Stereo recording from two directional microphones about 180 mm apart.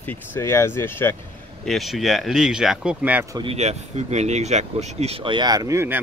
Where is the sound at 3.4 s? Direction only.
35° right (ahead or behind); by 6.0 s 15° right (ahead or behind).